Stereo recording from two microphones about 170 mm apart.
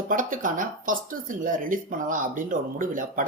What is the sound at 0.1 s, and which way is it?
Speech, 50° right (ahead or behind).